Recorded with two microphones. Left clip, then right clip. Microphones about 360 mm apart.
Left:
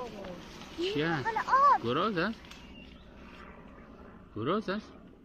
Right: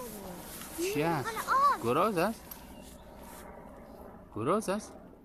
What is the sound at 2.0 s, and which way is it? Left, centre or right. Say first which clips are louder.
Speech: right 2 dB; centre.